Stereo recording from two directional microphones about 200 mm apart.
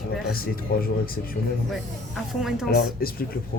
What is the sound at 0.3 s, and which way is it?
Speech, 50° left (ahead or behind).